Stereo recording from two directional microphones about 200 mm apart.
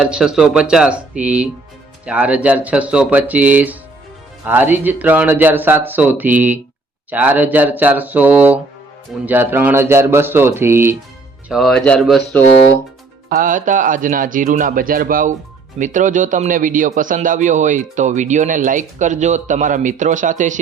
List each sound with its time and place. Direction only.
0.0 s speech: 5° right (ahead or behind)
11.4 s speech: centre (ahead or behind)
13.3 s speech: 40° right (ahead or behind)